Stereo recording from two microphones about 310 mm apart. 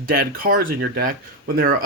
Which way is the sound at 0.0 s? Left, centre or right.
Right.